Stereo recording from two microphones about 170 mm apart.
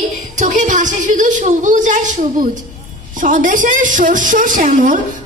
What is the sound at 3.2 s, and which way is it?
A woman's voice, 50° right (ahead or behind).